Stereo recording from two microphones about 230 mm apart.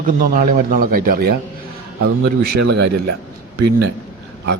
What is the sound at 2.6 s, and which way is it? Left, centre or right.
Speech, right.